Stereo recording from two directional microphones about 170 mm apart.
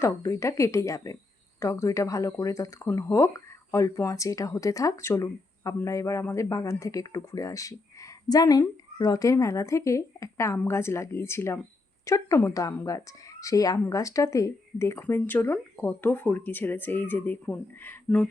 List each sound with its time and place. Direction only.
0.0 s speech: 15° left (ahead or behind)